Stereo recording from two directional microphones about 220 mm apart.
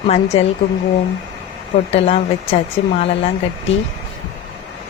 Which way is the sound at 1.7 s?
30° left (ahead or behind).